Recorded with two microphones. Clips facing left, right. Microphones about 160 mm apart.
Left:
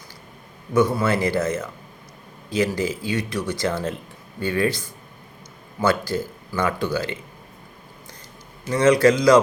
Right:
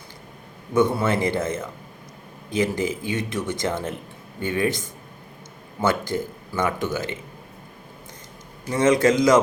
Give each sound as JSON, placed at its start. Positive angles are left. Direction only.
{"t": 0.9, "sound": "speech", "side_deg": -25}
{"t": 8.7, "sound": "speech", "side_deg": -20}